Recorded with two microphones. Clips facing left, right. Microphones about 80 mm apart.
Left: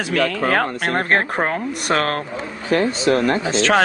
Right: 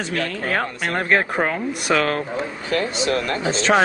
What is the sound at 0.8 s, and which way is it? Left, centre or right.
Speech, left.